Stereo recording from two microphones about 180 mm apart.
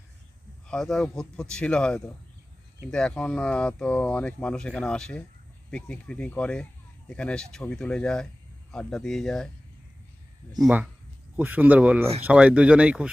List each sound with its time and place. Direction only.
0.7 s speech: 5° left (ahead or behind)
10.6 s speech: 10° right (ahead or behind)